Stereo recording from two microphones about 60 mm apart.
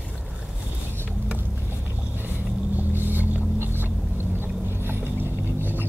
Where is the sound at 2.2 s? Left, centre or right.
Right.